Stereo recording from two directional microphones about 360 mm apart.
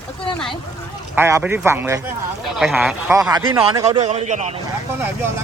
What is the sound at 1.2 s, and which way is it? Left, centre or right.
Speech, centre.